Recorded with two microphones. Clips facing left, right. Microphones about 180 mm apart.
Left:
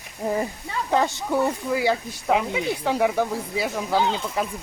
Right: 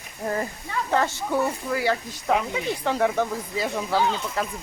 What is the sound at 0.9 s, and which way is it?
Speech, 15° left (ahead or behind).